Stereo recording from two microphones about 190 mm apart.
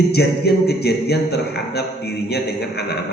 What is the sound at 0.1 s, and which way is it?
A man's voice, 60° left (ahead or behind).